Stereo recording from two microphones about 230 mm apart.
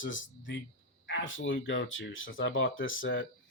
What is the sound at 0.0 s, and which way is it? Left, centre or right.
Speech, left.